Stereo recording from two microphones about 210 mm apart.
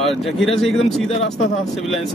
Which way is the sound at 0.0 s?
Centre (ahead or behind).